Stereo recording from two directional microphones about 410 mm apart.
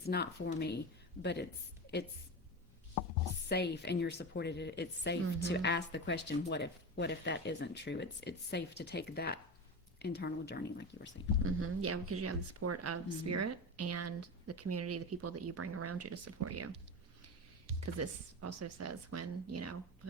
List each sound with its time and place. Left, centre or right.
0.1 s speech: left
3.5 s speech: left
11.4 s speech: right
18.0 s speech: right